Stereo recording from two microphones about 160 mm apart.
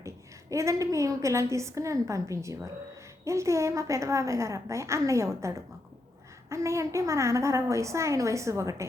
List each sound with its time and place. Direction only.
0.5 s a woman's voice: 20° right (ahead or behind)